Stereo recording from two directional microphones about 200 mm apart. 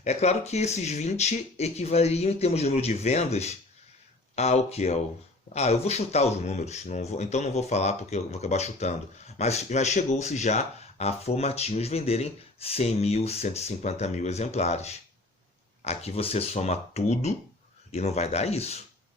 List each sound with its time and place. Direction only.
0.0 s speech: 35° left (ahead or behind)